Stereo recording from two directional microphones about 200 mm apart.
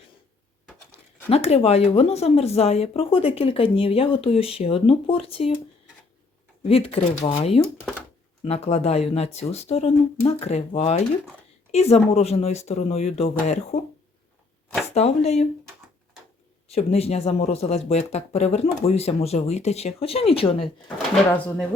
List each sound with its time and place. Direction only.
1.3 s speech: 30° left (ahead or behind)
6.7 s a woman's voice: 30° left (ahead or behind)
14.9 s speech: 30° left (ahead or behind)
16.6 s speech: 30° left (ahead or behind)
21.3 s speech: 5° left (ahead or behind)